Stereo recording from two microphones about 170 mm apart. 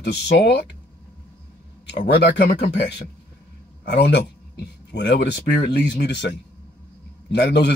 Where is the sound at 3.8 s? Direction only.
75° left (ahead or behind).